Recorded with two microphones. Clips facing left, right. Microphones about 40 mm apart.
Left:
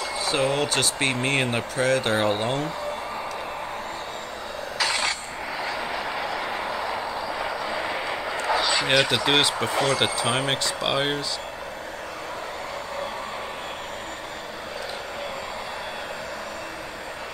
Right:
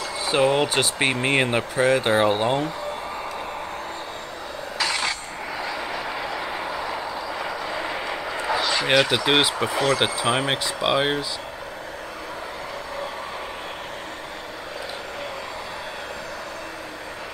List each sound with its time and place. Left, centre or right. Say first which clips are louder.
0.2 s speech: right 4 dB; centre
5.6 s vehicle: even; centre